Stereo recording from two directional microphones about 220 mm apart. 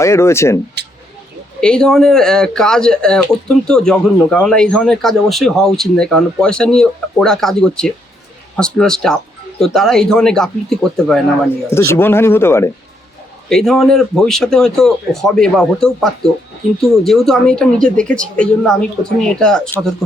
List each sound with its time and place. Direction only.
0.0 s speech: 10° left (ahead or behind)
1.6 s speech: 5° left (ahead or behind)